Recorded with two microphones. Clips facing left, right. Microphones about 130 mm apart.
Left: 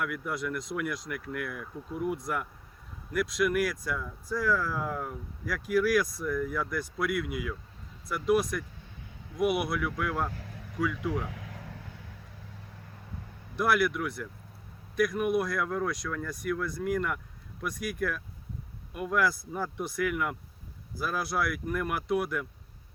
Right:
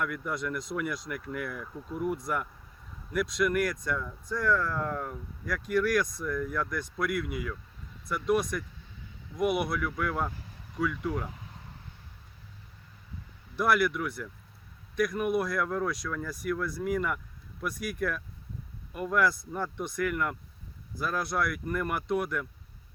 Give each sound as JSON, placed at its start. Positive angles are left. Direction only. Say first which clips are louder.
{"t": 0.0, "sound": "speech", "louder": "even", "side_deg": 5}
{"t": 10.3, "sound": "vehicle", "louder": "left 4 dB", "side_deg": 65}
{"t": 10.8, "sound": "speech", "louder": "even", "side_deg": 0}
{"t": 11.3, "sound": "vehicle", "louder": "left 4 dB", "side_deg": 90}
{"t": 13.6, "sound": "speech", "louder": "even", "side_deg": 0}